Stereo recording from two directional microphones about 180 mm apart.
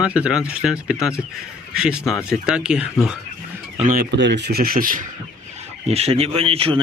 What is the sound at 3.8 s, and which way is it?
Speech, 45° right (ahead or behind).